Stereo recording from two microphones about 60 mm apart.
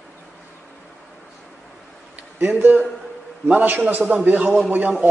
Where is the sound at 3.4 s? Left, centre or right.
Right.